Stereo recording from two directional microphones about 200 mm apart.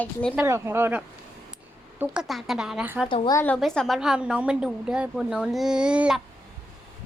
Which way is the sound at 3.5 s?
Centre (ahead or behind).